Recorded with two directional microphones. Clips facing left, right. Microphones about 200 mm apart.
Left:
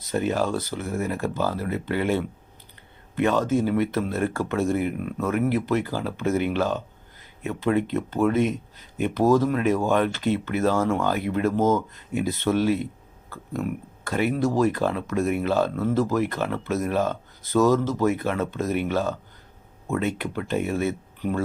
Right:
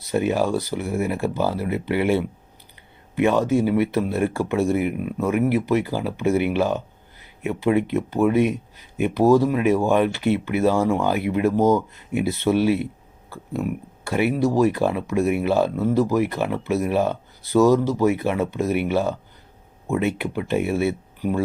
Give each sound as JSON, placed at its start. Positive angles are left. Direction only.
{"t": 0.1, "sound": "speech", "side_deg": -10}